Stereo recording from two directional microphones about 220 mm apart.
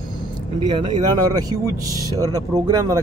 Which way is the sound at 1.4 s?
15° right (ahead or behind).